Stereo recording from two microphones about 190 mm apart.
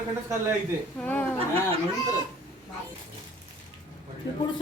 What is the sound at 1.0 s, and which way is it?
Speech, 10° left (ahead or behind).